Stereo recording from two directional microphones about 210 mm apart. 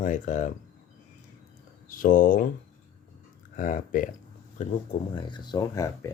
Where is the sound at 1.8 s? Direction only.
40° left (ahead or behind).